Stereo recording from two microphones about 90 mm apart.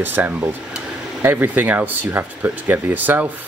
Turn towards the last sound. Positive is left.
turn(degrees=-20)  # may be behind; listen again after turning